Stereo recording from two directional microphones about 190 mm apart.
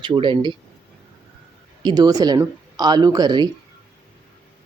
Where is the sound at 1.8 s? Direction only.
20° right (ahead or behind).